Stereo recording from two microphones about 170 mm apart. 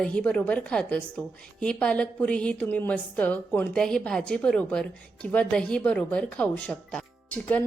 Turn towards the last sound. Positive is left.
turn(degrees=10)  # may be behind; listen again after turning